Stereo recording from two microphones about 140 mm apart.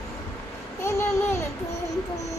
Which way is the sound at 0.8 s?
20° left (ahead or behind).